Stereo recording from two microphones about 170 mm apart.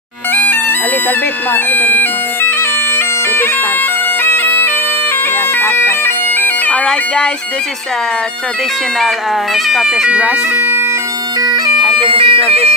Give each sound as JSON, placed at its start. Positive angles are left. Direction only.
{"t": 0.3, "sound": "bagpipes", "side_deg": 10}
{"t": 1.5, "sound": "speech", "side_deg": 10}
{"t": 4.2, "sound": "bagpipes", "side_deg": 10}
{"t": 9.7, "sound": "speech", "side_deg": 0}
{"t": 11.4, "sound": "bagpipes", "side_deg": -25}
{"t": 12.0, "sound": "speech", "side_deg": -30}